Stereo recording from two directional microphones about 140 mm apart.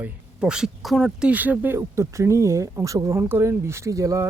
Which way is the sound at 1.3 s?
10° right (ahead or behind).